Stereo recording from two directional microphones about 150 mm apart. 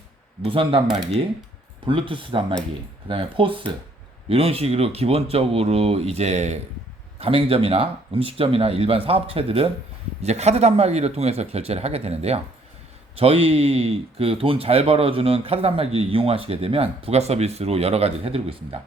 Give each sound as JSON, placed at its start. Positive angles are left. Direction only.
{"t": 0.4, "sound": "speech", "side_deg": -35}
{"t": 1.8, "sound": "speech", "side_deg": -35}